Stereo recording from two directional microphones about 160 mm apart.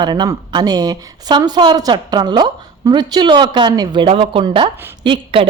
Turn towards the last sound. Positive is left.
turn(degrees=-35)  # may be behind; listen again after turning